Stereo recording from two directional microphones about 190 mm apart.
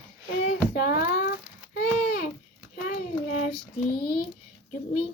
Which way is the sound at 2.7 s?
45° left (ahead or behind).